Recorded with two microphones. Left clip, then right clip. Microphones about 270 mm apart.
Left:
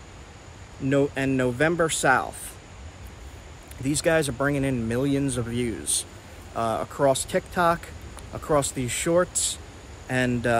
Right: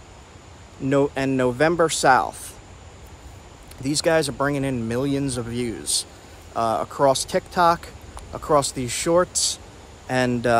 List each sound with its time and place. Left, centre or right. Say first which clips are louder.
0.8 s speech: right 3 dB; centre
3.8 s speech: right 3 dB; centre